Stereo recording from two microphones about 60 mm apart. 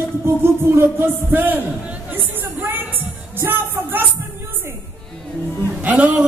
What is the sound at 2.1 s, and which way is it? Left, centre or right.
Music, right.